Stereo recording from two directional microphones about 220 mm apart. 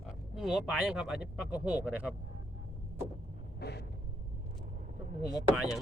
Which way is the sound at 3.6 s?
45° left (ahead or behind).